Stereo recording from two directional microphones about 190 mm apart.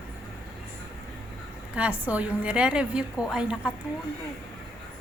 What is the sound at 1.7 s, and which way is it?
A woman's voice, 5° right (ahead or behind).